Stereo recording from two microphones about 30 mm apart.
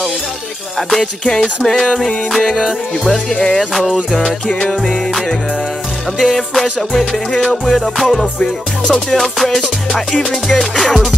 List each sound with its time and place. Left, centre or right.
0.7 s music: centre
3.3 s music: centre
3.5 s music: centre
6.3 s music: centre